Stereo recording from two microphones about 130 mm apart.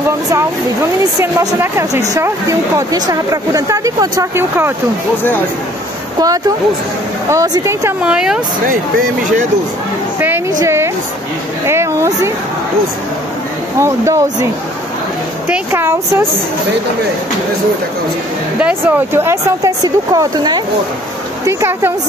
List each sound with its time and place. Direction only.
1.2 s speech: 20° right (ahead or behind)
6.1 s speech: 30° right (ahead or behind)
8.0 s speech: 5° right (ahead or behind)
10.6 s a sound: 20° right (ahead or behind)
13.7 s speech: 20° right (ahead or behind)
18.6 s speech: 15° right (ahead or behind); by 20.6 s 30° right (ahead or behind)
21.5 s speech: 20° right (ahead or behind)